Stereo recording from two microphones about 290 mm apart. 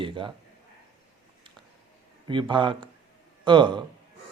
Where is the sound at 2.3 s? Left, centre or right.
Centre.